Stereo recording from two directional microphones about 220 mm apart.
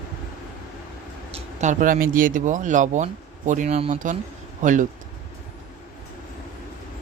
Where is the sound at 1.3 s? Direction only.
30° right (ahead or behind).